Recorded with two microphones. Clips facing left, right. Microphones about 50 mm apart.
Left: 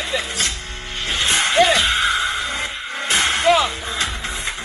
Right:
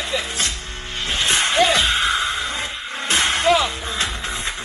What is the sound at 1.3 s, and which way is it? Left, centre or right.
Music, left.